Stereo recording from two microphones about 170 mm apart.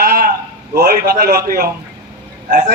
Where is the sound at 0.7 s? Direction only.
65° right (ahead or behind).